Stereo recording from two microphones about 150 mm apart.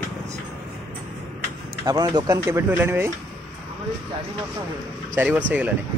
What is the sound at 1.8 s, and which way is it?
Speech, 25° right (ahead or behind).